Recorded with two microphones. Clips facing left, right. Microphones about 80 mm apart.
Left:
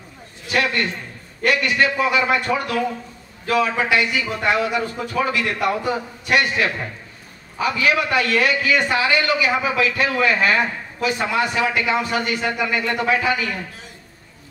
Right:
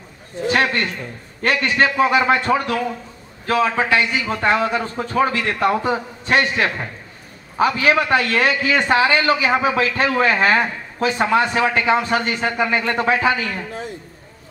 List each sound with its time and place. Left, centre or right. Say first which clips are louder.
0.4 s a man's voice: right 3 dB; right